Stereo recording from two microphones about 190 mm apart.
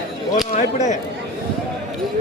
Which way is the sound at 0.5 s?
40° left (ahead or behind).